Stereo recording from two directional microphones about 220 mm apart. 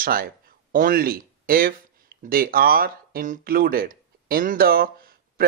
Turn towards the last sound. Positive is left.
turn(degrees=-40)  # may be behind; listen again after turning